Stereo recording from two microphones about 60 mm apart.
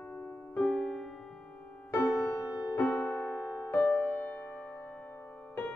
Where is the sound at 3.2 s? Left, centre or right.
Left.